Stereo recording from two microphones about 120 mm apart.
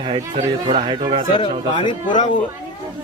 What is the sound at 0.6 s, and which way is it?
Speech, 45° right (ahead or behind).